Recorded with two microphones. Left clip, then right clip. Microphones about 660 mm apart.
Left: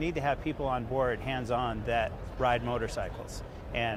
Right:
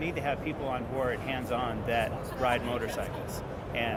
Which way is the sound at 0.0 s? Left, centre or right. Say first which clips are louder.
Left 1 dB; left.